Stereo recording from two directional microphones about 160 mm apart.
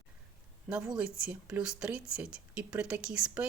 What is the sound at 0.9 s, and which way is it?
A woman's voice, 5° right (ahead or behind).